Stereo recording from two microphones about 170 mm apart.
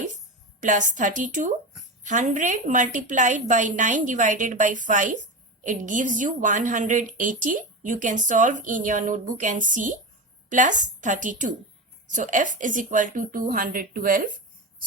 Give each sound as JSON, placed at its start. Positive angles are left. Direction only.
{"t": 0.6, "sound": "a woman's voice", "side_deg": -45}